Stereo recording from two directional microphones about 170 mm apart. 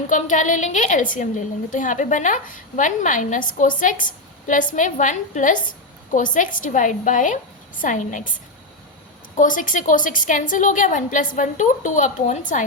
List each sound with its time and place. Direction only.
0.1 s a woman's voice: 50° left (ahead or behind)
9.3 s a woman's voice: 50° left (ahead or behind)